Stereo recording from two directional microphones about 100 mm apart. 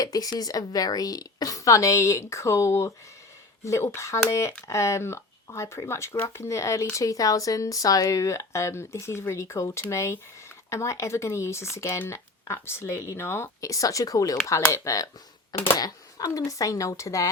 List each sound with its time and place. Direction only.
0.0 s a woman's voice: 40° left (ahead or behind)